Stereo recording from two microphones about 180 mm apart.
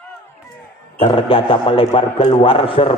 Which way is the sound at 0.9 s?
30° left (ahead or behind).